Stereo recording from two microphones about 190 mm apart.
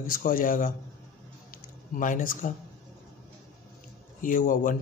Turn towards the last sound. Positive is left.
turn(degrees=45)  # may be behind; listen again after turning